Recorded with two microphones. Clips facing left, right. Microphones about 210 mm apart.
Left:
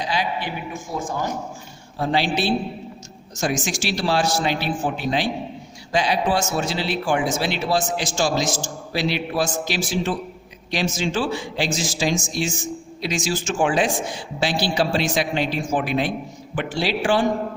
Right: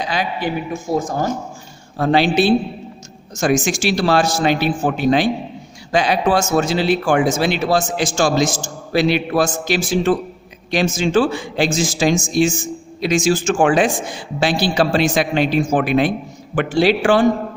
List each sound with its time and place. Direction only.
0.0 s a man's voice: 50° right (ahead or behind)
2.0 s a man's voice: 60° right (ahead or behind)
3.5 s a man's voice: 50° right (ahead or behind); by 17.2 s 65° right (ahead or behind)